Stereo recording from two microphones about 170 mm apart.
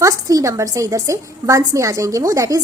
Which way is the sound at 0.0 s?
20° right (ahead or behind).